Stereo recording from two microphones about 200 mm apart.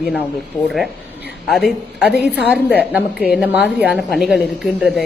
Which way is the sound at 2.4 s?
5° right (ahead or behind).